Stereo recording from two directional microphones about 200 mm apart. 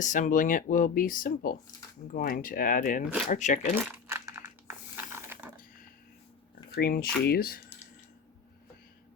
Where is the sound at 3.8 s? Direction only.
10° right (ahead or behind).